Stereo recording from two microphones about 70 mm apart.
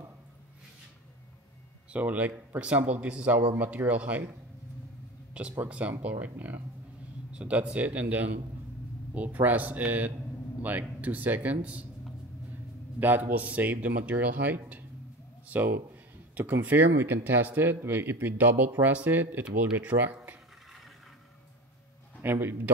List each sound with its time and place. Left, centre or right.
1.9 s speech: right
5.6 s speech: centre
13.0 s speech: right
22.2 s a man's voice: right